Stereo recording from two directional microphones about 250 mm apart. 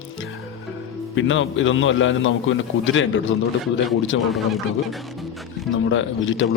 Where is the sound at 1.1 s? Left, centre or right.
Left.